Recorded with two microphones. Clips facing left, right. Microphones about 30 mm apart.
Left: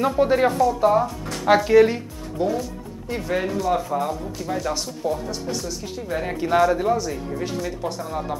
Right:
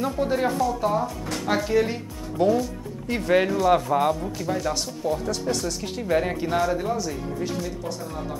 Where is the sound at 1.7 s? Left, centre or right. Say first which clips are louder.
Left 8 dB; left.